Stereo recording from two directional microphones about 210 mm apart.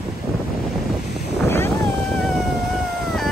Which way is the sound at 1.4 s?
10° left (ahead or behind).